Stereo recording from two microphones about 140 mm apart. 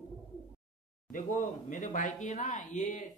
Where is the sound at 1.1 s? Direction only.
70° left (ahead or behind).